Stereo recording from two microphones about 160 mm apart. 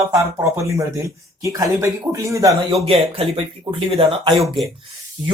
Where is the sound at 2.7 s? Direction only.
35° right (ahead or behind).